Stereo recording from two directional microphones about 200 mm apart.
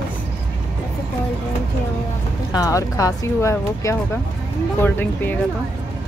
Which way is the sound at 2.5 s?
15° left (ahead or behind).